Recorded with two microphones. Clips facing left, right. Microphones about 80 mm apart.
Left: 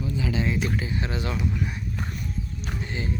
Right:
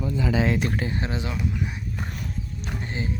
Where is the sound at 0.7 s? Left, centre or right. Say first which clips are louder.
Right 2 dB; right.